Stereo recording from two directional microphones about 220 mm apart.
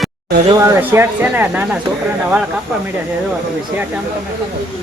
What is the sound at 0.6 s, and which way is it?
Speech, 10° right (ahead or behind).